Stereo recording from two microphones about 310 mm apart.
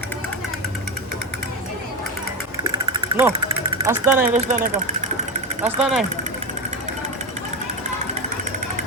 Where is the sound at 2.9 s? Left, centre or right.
Centre.